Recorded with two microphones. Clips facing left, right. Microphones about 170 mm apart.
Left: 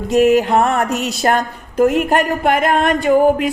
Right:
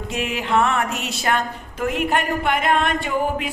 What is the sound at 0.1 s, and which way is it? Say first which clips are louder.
A woman's voice: left 11 dB; 40° left (ahead or behind).